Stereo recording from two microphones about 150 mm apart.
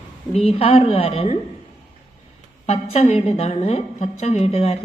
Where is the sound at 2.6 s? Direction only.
45° left (ahead or behind).